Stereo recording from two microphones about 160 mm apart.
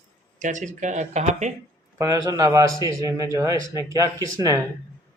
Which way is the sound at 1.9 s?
20° right (ahead or behind).